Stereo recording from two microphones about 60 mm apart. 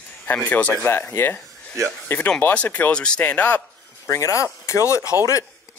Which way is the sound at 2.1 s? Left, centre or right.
Left.